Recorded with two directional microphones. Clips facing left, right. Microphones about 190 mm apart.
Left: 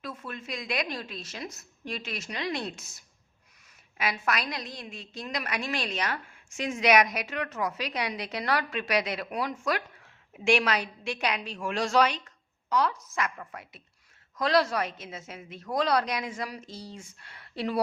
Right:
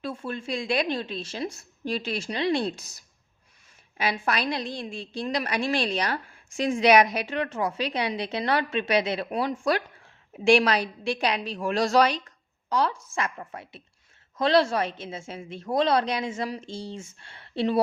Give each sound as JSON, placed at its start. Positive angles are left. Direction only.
{"t": 0.0, "sound": "a woman's voice", "side_deg": -30}